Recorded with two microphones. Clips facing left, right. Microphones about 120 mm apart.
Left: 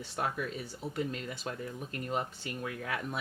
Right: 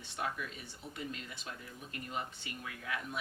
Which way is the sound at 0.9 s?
50° left (ahead or behind).